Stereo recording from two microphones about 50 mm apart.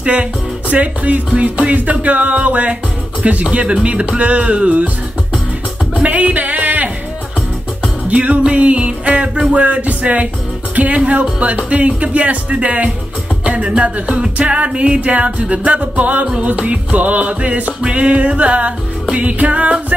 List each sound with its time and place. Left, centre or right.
0.0 s music: right
6.0 s speech: right
8.1 s music: right